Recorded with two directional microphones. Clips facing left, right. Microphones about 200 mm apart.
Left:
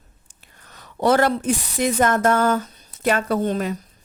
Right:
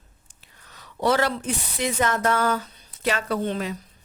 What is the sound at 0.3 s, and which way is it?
A woman's voice, 50° left (ahead or behind).